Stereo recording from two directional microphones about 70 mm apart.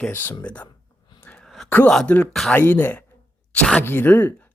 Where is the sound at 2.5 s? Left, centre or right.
Left.